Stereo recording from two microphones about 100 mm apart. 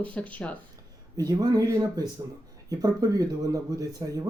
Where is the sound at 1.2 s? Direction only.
35° right (ahead or behind).